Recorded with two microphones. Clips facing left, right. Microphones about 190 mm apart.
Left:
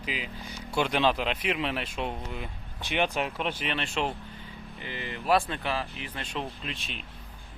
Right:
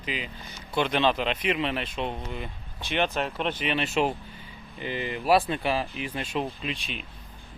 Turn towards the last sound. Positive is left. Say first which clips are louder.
# right 4 dB
turn(degrees=0)  # may be behind; listen again after turning